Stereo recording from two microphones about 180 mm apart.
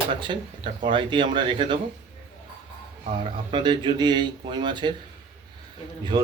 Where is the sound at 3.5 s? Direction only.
25° right (ahead or behind).